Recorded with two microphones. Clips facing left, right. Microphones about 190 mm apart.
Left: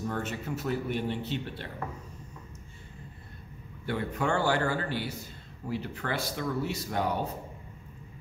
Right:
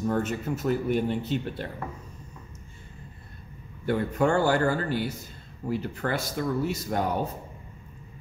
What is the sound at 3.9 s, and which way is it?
Speech, 45° right (ahead or behind).